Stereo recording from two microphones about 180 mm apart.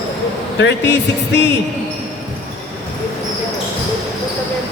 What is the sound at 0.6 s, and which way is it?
Speech, 75° left (ahead or behind).